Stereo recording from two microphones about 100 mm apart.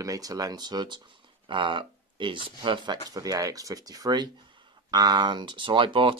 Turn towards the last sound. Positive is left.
turn(degrees=-55)  # may be behind; listen again after turning